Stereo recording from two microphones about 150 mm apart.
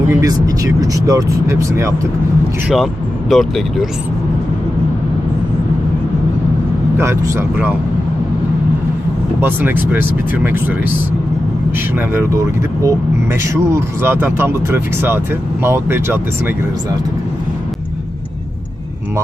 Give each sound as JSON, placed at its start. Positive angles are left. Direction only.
{"t": 0.1, "sound": "speech", "side_deg": -25}
{"t": 2.6, "sound": "speech", "side_deg": 0}
{"t": 6.9, "sound": "speech", "side_deg": -15}
{"t": 9.4, "sound": "speech", "side_deg": -15}
{"t": 11.9, "sound": "speech", "side_deg": -15}